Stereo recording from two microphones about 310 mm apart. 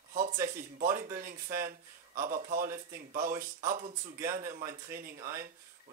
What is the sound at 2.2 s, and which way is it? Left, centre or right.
Speech, right.